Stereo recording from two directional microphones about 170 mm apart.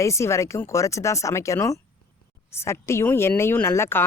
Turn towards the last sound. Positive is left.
turn(degrees=15)  # may be behind; listen again after turning